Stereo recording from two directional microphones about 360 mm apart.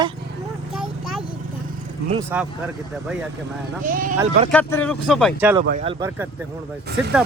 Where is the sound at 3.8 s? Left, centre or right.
Right.